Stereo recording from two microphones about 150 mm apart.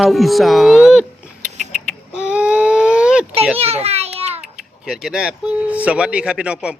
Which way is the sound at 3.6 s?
45° right (ahead or behind).